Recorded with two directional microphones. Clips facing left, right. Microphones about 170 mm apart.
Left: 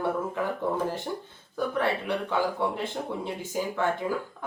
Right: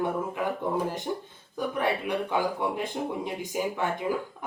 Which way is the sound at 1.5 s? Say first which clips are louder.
Left 1 dB; 15° right (ahead or behind).